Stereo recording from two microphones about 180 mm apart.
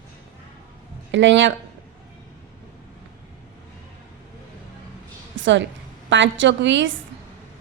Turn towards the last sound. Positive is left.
turn(degrees=-90)